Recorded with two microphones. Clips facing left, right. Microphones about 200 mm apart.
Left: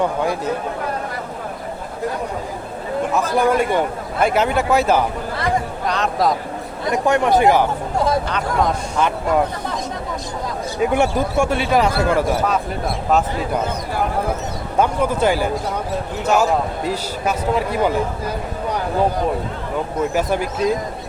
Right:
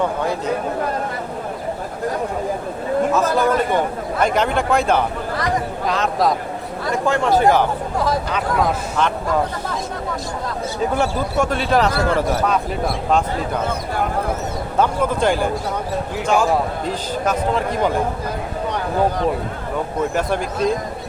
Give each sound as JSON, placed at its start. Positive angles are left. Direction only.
{"t": 3.1, "sound": "speech", "side_deg": 15}
{"t": 6.8, "sound": "speech", "side_deg": 15}
{"t": 7.9, "sound": "speech", "side_deg": 25}
{"t": 8.3, "sound": "speech", "side_deg": -5}
{"t": 10.8, "sound": "speech", "side_deg": 15}
{"t": 14.8, "sound": "speech", "side_deg": 10}
{"t": 20.1, "sound": "speech", "side_deg": 5}